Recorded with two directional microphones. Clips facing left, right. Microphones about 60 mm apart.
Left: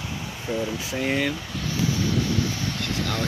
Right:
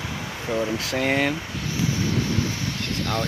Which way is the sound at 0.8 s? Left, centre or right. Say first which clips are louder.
Right 3 dB; right.